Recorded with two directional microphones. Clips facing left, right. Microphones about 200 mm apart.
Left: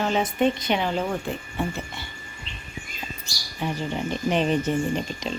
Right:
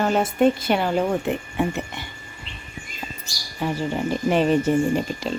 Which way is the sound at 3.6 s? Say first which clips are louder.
Right 4 dB; 10° right (ahead or behind).